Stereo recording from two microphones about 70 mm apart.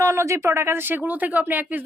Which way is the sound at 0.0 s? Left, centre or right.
Right.